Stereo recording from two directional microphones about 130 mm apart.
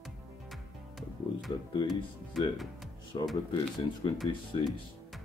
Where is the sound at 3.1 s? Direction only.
40° left (ahead or behind).